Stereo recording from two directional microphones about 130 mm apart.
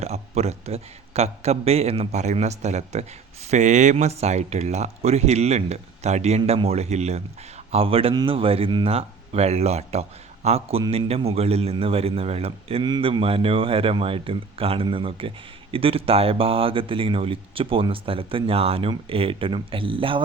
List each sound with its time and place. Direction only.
0.0 s speech: 55° right (ahead or behind)
12.8 s speech: 40° right (ahead or behind)